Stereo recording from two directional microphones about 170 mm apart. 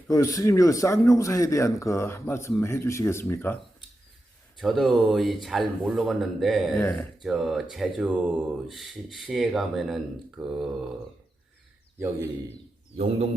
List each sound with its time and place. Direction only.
0.1 s speech: 20° left (ahead or behind)
4.6 s speech: centre (ahead or behind)
6.7 s speech: 10° left (ahead or behind)
7.2 s speech: centre (ahead or behind)
11.9 s a man's voice: 15° right (ahead or behind)